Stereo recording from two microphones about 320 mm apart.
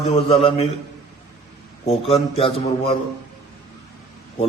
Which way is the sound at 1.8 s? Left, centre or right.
Centre.